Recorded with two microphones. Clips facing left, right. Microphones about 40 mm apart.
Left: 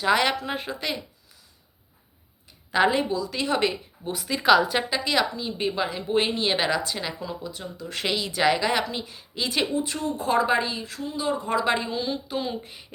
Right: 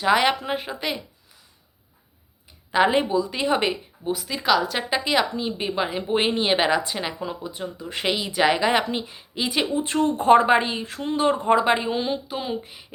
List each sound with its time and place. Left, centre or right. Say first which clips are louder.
0.0 s speech: right 2 dB; centre
2.9 s speech: right 4 dB; right
4.0 s a woman's voice: left 1 dB; centre
4.9 s speech: right 2 dB; centre
9.8 s speech: right 8 dB; right
11.0 s speech: right 7 dB; right
11.5 s speech: right 4 dB; right
12.3 s speech: right 1 dB; centre